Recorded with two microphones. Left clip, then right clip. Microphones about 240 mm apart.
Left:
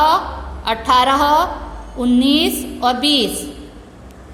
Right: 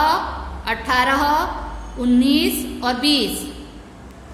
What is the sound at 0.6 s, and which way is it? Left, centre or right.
A woman's voice, centre.